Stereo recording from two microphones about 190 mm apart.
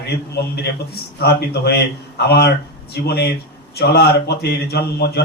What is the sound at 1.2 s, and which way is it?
Speech, 55° left (ahead or behind).